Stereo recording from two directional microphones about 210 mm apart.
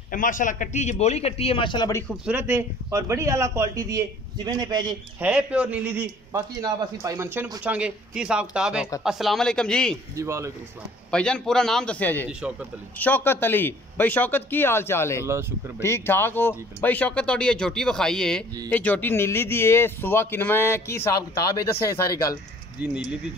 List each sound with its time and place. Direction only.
0.1 s a man's voice: 40° left (ahead or behind); by 2.1 s 15° left (ahead or behind)
2.2 s a man's voice: 10° right (ahead or behind)
5.2 s a man's voice: 5° right (ahead or behind)
10.1 s a man's voice: 15° right (ahead or behind)
11.1 s speech: 5° left (ahead or behind)
12.3 s speech: 5° right (ahead or behind)
13.0 s a man's voice: 10° left (ahead or behind)
22.8 s a man's voice: 5° right (ahead or behind)